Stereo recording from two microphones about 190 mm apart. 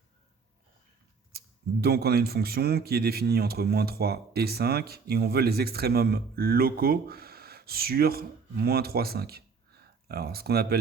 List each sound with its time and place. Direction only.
1.3 s speech: 55° right (ahead or behind)